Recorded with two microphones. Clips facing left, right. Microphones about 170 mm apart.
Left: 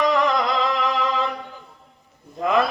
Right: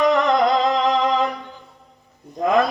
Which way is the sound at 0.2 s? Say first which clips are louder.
Right 4 dB; 45° right (ahead or behind).